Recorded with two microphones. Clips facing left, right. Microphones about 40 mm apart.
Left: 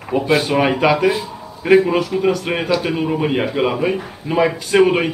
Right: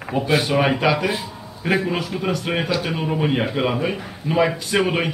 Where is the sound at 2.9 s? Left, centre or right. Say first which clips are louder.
Left 3 dB; centre.